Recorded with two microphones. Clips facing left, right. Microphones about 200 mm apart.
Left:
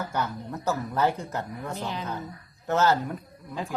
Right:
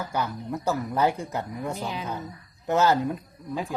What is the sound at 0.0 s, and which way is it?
Speech, 10° right (ahead or behind).